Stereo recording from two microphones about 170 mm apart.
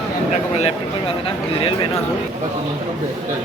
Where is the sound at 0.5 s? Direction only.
35° left (ahead or behind).